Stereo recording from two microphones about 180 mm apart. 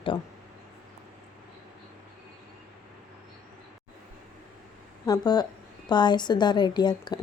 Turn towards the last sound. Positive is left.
turn(degrees=25)  # may be behind; listen again after turning